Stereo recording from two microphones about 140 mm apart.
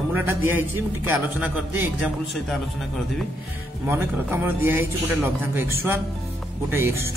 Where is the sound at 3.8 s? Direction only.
15° right (ahead or behind).